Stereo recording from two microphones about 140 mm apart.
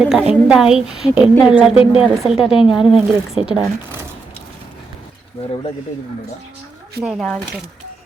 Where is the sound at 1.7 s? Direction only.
45° left (ahead or behind).